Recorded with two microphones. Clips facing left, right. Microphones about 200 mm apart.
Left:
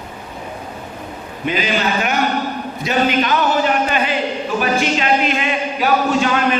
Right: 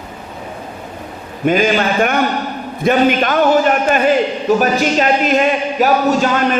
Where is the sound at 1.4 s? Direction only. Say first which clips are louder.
Right 6 dB; 50° right (ahead or behind).